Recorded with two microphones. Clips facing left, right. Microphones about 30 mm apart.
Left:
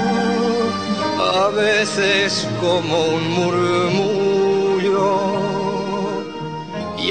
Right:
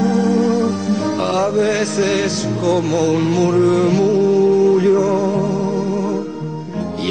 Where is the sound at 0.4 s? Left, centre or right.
Left.